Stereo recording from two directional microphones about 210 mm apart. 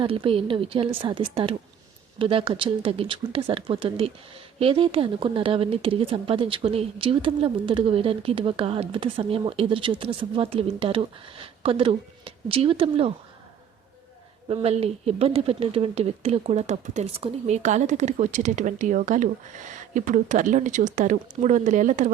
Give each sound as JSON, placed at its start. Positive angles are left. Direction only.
{"t": 0.0, "sound": "a woman's voice", "side_deg": -25}
{"t": 14.4, "sound": "speech", "side_deg": -25}